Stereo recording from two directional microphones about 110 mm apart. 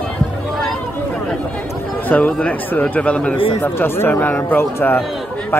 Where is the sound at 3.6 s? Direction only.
20° left (ahead or behind).